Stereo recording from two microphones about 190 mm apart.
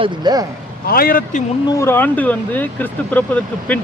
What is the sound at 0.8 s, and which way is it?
Speech, 50° left (ahead or behind).